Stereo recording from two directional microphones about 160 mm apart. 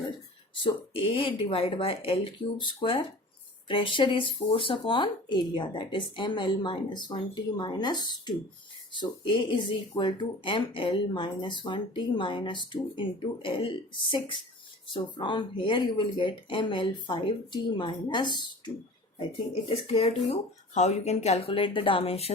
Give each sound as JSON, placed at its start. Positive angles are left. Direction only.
{"t": 0.6, "sound": "a woman's voice", "side_deg": 35}